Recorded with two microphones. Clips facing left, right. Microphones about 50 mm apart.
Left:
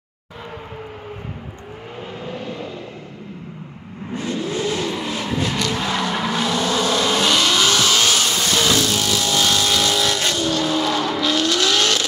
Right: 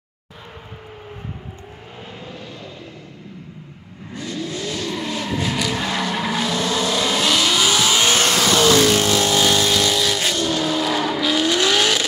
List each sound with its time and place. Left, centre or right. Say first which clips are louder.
4.1 s vehicle: left 4 dB; left
4.9 s vehicle: left 1 dB; centre
8.9 s vehicle: right 3 dB; right
9.3 s vehicle: right 2 dB; centre
9.7 s vehicle: even; centre